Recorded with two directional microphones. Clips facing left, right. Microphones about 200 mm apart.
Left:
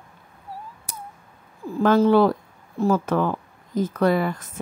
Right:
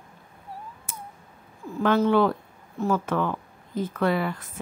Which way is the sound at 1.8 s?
40° left (ahead or behind).